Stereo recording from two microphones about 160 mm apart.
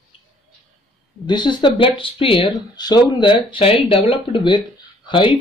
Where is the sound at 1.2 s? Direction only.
30° left (ahead or behind).